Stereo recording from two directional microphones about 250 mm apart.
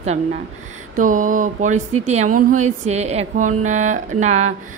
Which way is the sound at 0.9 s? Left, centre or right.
Right.